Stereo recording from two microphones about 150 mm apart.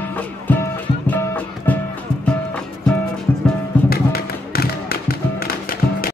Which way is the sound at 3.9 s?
90° left.